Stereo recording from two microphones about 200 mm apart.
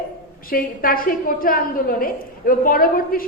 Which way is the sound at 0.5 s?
45° left (ahead or behind).